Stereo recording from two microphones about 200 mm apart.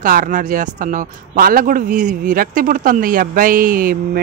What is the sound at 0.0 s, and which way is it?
Speech, 40° right (ahead or behind).